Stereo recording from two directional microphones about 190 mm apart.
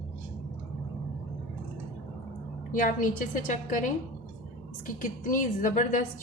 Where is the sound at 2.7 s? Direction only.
45° left (ahead or behind).